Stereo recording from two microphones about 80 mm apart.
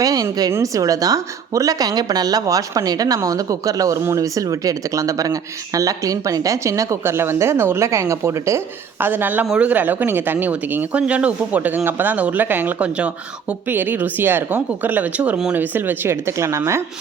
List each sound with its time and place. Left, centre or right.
0.0 s a woman's voice: right